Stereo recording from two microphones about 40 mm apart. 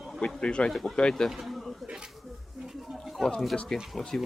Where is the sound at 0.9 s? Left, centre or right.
Centre.